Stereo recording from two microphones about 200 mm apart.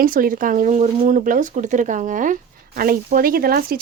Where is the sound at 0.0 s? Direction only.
45° right (ahead or behind).